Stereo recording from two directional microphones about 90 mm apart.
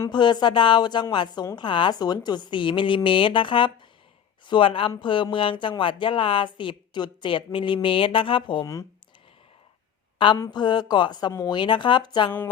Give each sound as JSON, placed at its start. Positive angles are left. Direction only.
{"t": 0.1, "sound": "speech", "side_deg": 55}
{"t": 4.9, "sound": "speech", "side_deg": 65}
{"t": 10.5, "sound": "speech", "side_deg": 55}
{"t": 11.5, "sound": "speech", "side_deg": 60}